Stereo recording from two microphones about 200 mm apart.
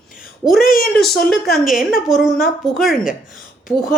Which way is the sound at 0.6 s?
45° left (ahead or behind).